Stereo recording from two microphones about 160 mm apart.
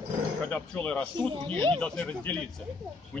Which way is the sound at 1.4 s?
35° right (ahead or behind).